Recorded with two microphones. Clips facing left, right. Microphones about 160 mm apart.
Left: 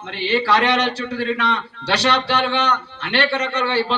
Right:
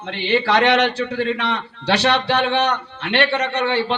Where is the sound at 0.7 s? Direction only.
55° right (ahead or behind).